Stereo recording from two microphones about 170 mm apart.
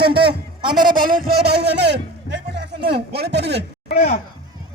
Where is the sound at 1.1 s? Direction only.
60° right (ahead or behind); by 3.6 s 80° right.